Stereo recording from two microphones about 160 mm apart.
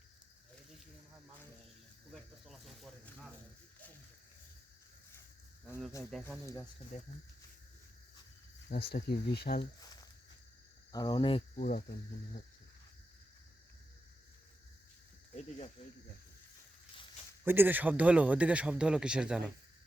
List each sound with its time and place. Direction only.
2.1 s speech: centre (ahead or behind)
6.4 s speech: 20° left (ahead or behind)
6.9 s speech: 45° left (ahead or behind)
8.7 s speech: 85° left
10.9 s speech: 25° left (ahead or behind)
11.5 s speech: 60° left (ahead or behind)
15.4 s speech: 45° left (ahead or behind)
17.4 s a man's voice: 15° right (ahead or behind)